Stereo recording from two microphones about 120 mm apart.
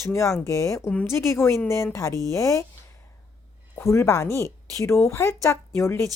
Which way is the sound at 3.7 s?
25° left (ahead or behind).